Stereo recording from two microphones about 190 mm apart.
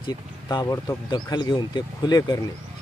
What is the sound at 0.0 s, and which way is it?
Speech, 20° left (ahead or behind).